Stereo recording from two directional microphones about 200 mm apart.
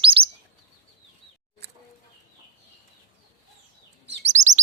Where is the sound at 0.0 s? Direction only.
25° right (ahead or behind).